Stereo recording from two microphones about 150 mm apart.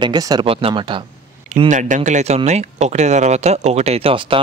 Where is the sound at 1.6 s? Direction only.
55° right (ahead or behind); by 4.4 s 35° right (ahead or behind).